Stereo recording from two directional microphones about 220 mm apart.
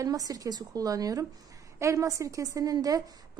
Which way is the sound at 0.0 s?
15° right (ahead or behind).